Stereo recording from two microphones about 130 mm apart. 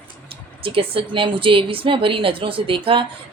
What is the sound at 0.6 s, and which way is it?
A woman's voice, 45° right (ahead or behind).